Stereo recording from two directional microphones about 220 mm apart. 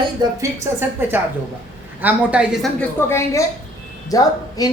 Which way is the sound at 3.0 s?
10° left (ahead or behind).